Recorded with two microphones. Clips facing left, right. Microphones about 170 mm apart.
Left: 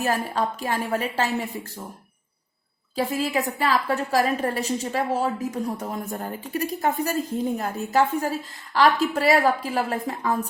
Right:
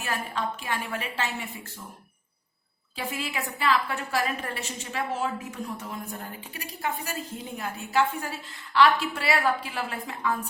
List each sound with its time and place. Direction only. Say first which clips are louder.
0.0 s a woman's voice: left 7 dB; 40° left (ahead or behind)
2.9 s a woman's voice: left 9 dB; 40° left (ahead or behind)